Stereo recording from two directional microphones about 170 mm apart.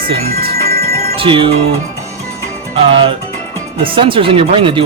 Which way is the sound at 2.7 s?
30° right (ahead or behind).